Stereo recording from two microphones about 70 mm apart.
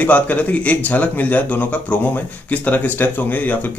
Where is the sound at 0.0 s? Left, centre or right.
Left.